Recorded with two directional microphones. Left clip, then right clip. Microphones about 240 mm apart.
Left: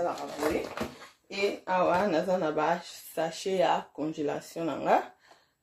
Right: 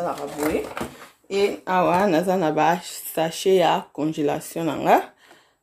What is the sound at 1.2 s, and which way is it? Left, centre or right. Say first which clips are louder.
Speech: right 8 dB; right.